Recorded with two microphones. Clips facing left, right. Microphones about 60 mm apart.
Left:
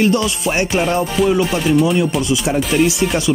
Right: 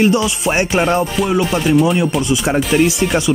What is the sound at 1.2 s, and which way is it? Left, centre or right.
Speech, centre.